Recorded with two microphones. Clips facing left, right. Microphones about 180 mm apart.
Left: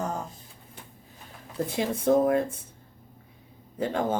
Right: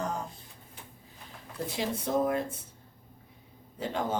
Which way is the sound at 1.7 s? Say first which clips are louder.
Left 8 dB; 50° left (ahead or behind).